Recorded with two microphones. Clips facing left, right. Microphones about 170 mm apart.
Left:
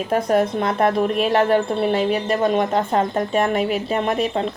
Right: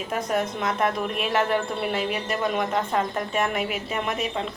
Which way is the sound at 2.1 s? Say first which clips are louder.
Left 8 dB; 45° left (ahead or behind).